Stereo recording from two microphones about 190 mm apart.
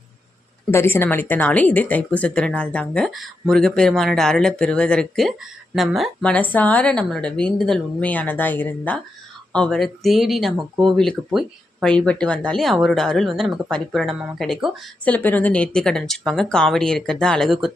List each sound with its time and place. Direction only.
0.7 s a woman's voice: 15° left (ahead or behind)